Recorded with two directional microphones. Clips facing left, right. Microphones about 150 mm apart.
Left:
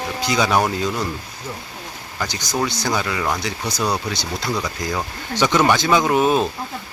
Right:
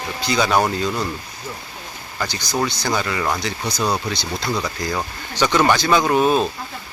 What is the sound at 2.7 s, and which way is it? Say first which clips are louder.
Speech: even; 10° left (ahead or behind).